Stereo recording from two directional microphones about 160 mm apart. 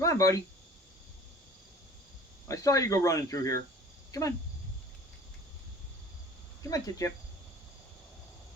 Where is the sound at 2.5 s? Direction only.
20° left (ahead or behind).